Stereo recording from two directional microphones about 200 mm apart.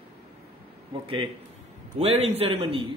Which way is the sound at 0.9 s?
25° right (ahead or behind).